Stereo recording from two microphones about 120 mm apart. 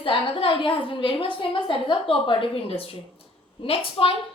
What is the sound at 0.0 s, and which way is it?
A woman's voice, 50° left (ahead or behind).